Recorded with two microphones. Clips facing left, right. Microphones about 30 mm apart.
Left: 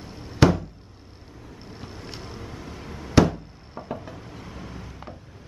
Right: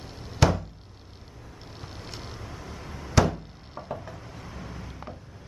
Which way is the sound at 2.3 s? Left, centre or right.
Centre.